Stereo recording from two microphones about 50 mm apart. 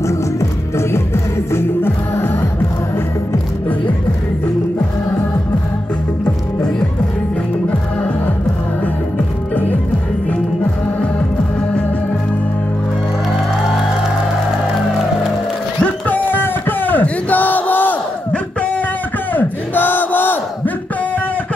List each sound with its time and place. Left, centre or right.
0.0 s music: left
15.8 s a sound: left
19.3 s battle cry: left